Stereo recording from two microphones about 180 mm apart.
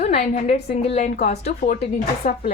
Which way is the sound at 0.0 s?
40° left (ahead or behind).